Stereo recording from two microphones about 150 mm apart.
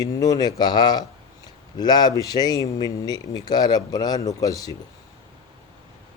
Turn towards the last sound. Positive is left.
turn(degrees=25)  # may be behind; listen again after turning